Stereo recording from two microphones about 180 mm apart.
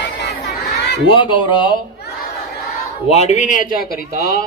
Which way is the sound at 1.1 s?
25° left (ahead or behind).